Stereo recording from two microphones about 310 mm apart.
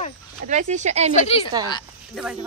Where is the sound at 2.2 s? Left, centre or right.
Centre.